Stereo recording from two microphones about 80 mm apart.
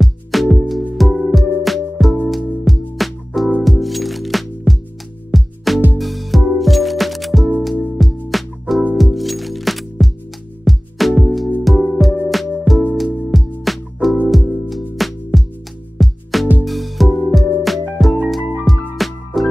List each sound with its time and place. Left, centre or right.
0.0 s music: centre